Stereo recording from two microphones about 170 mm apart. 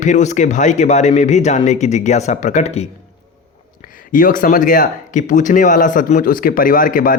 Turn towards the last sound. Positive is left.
turn(degrees=55)  # may be behind; listen again after turning